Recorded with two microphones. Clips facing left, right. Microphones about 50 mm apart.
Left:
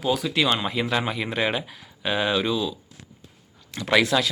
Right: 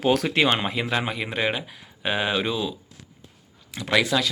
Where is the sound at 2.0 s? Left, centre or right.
Centre.